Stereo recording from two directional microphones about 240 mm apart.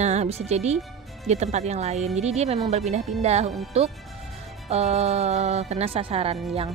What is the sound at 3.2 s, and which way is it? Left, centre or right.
Speech, right.